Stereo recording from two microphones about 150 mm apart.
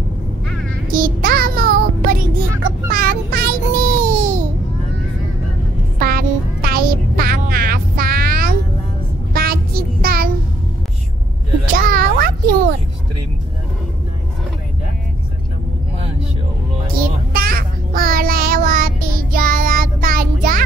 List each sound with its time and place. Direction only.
0.9 s child singing: 70° right (ahead or behind)
5.9 s music: 80° right
9.3 s child singing: 85° right
11.6 s a sound: 70° right (ahead or behind)
17.0 s child singing: 75° right (ahead or behind)